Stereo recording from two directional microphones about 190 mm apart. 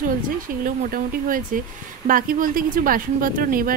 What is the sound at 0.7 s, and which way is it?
Speech, 50° right (ahead or behind).